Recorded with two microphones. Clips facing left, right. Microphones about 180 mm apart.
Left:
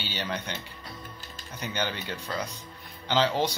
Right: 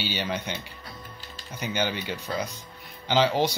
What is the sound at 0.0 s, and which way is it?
Speech, 10° right (ahead or behind).